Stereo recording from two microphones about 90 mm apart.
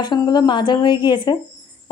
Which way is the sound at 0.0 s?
55° left (ahead or behind).